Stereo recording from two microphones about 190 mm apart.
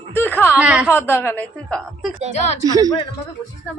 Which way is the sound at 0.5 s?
5° right (ahead or behind).